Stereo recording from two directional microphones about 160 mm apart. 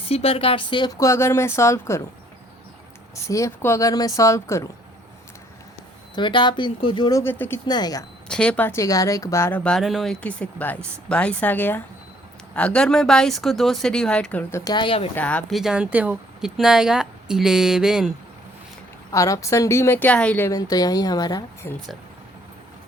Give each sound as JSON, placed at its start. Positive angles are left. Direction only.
{"t": 0.1, "sound": "speech", "side_deg": 35}
{"t": 3.2, "sound": "speech", "side_deg": 20}
{"t": 6.1, "sound": "speech", "side_deg": 30}
{"t": 7.2, "sound": "speech", "side_deg": 15}
{"t": 7.7, "sound": "speech", "side_deg": 25}
{"t": 8.3, "sound": "speech", "side_deg": 5}
{"t": 14.6, "sound": "speech", "side_deg": 25}
{"t": 15.1, "sound": "speech", "side_deg": 10}
{"t": 19.1, "sound": "speech", "side_deg": 20}
{"t": 20.5, "sound": "speech", "side_deg": 25}